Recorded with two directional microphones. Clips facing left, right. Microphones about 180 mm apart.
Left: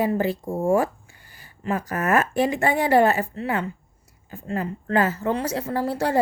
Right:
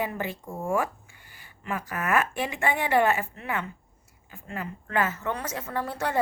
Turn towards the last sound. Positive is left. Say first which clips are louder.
# left 6 dB
turn(degrees=30)  # may be behind; listen again after turning